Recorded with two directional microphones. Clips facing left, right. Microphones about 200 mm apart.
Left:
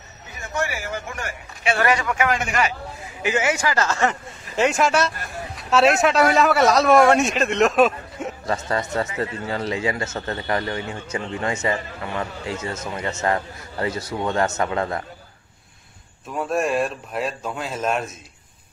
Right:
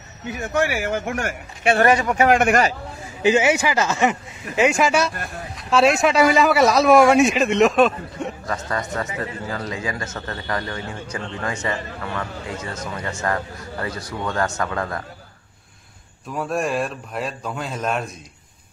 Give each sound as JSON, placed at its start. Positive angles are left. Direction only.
{"t": 0.3, "sound": "speech", "side_deg": -55}
{"t": 2.3, "sound": "speech", "side_deg": -55}
{"t": 3.2, "sound": "speech", "side_deg": -25}
{"t": 4.6, "sound": "a man's voice", "side_deg": 0}
{"t": 8.5, "sound": "a man's voice", "side_deg": 25}
{"t": 12.8, "sound": "a man's voice", "side_deg": 25}
{"t": 16.3, "sound": "a man's voice", "side_deg": 0}